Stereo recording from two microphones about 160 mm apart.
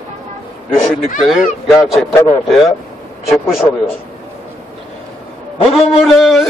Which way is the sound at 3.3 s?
5° right (ahead or behind).